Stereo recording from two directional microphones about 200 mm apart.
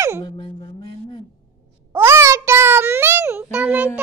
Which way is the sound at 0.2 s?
25° left (ahead or behind).